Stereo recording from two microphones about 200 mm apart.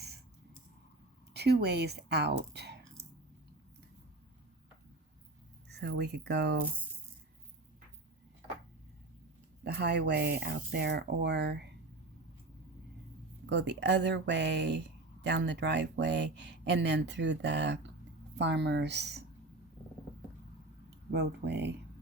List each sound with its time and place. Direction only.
1.3 s a woman's voice: 55° right (ahead or behind)
5.6 s speech: 60° right (ahead or behind)
9.6 s speech: 55° right (ahead or behind)
13.5 s speech: 60° right (ahead or behind)
21.1 s speech: 55° right (ahead or behind)